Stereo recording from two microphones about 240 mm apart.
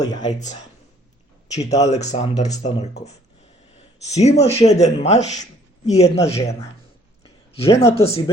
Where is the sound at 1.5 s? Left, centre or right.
Left.